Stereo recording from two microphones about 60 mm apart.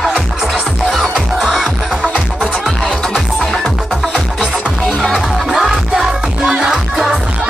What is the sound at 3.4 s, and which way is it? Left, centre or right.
Music, centre.